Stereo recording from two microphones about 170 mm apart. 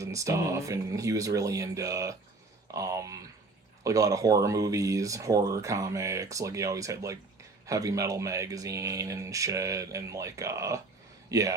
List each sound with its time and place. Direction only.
0.0 s speech: 20° right (ahead or behind)